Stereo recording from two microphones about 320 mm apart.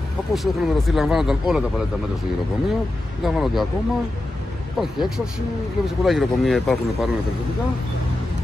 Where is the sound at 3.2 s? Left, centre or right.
Centre.